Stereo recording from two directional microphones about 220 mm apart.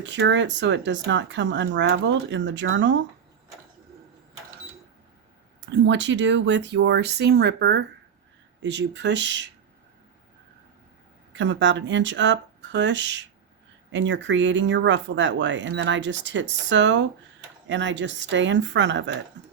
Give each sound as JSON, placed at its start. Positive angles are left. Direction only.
{"t": 0.0, "sound": "speech", "side_deg": -55}
{"t": 5.6, "sound": "speech", "side_deg": -55}
{"t": 11.3, "sound": "speech", "side_deg": -55}